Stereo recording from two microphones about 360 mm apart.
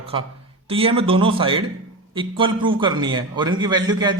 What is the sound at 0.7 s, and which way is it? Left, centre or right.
A man's voice, centre.